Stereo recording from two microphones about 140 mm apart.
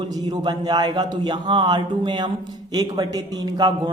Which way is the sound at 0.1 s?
30° right (ahead or behind).